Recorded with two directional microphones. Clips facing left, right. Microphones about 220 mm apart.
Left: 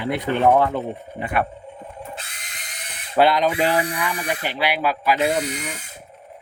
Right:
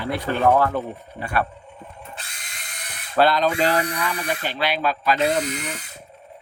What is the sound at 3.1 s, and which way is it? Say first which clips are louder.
Speech: left 1 dB; 15° left (ahead or behind).